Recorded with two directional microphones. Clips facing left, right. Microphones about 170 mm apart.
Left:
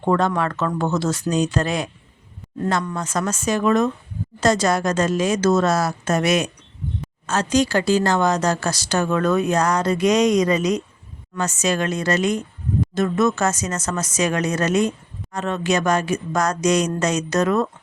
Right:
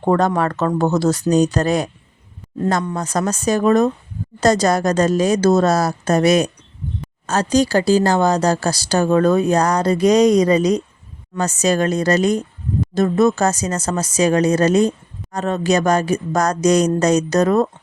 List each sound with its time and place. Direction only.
0.0 s speech: 40° right (ahead or behind)
2.9 s speech: 35° right (ahead or behind)